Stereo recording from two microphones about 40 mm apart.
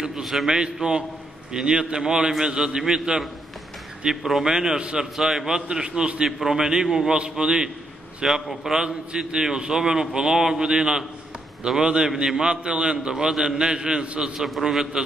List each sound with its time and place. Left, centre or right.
0.2 s a man's voice: centre
0.5 s a man's voice: centre
4.2 s a man's voice: centre
4.5 s a man's voice: centre
5.1 s a man's voice: centre
5.5 s a man's voice: centre
14.6 s a man's voice: centre